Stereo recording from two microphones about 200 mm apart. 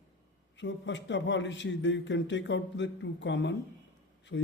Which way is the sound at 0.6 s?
65° left (ahead or behind).